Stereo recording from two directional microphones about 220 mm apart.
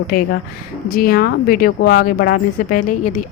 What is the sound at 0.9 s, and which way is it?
Speech, 40° left (ahead or behind).